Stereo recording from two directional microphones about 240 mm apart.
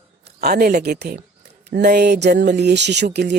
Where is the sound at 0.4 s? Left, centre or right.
Right.